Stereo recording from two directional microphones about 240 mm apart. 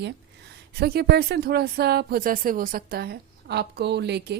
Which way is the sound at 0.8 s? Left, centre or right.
Right.